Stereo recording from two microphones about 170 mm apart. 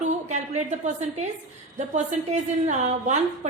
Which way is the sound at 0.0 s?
45° right (ahead or behind).